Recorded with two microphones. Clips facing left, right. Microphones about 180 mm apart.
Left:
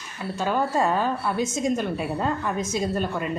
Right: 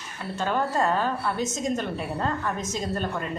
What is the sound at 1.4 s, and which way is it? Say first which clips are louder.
Speech: left 3 dB; 45° right (ahead or behind).